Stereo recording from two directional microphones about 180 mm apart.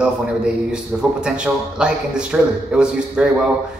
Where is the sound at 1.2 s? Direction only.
5° right (ahead or behind).